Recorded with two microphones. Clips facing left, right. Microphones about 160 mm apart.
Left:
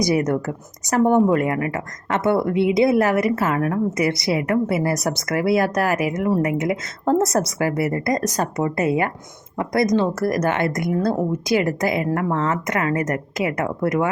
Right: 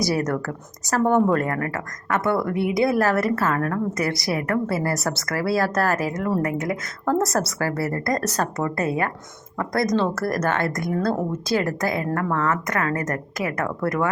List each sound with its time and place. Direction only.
0.0 s speech: 20° left (ahead or behind)